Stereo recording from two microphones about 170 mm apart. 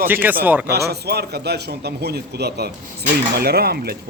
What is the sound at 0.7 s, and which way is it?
A man's voice, 70° right (ahead or behind).